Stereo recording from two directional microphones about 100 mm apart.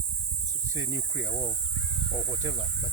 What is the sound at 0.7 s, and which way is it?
Speech, 30° right (ahead or behind).